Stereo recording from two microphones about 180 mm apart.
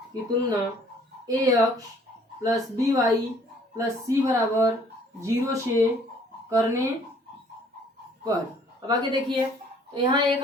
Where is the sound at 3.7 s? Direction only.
15° right (ahead or behind).